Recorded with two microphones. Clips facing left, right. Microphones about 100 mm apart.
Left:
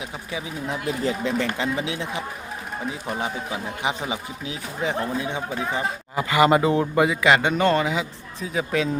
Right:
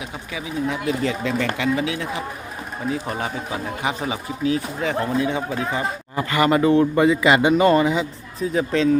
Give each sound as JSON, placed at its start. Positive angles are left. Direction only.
{"t": 0.3, "sound": "speech", "side_deg": 30}
{"t": 2.9, "sound": "a man's voice", "side_deg": 15}
{"t": 7.2, "sound": "speech", "side_deg": -5}